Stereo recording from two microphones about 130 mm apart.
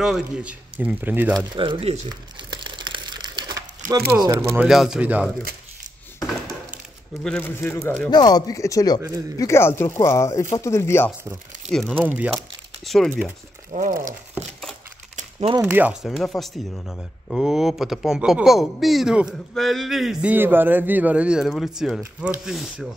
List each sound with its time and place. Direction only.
0.0 s speech: 5° right (ahead or behind)
1.6 s speech: 45° right (ahead or behind)
2.5 s crumpling: 35° right (ahead or behind)
3.8 s speech: 90° right
4.2 s speech: 25° right (ahead or behind)
4.6 s speech: 5° right (ahead or behind)
7.2 s speech: 10° left (ahead or behind)
8.1 s speech: 35° left (ahead or behind)
11.9 s speech: 10° right (ahead or behind)
12.8 s speech: centre (ahead or behind)
13.7 s speech: 80° right
15.6 s speech: 10° right (ahead or behind)